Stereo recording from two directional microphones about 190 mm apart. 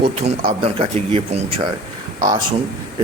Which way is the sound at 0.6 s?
30° right (ahead or behind).